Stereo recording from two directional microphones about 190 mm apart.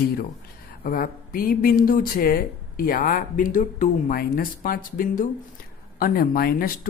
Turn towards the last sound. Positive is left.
turn(degrees=50)  # may be behind; listen again after turning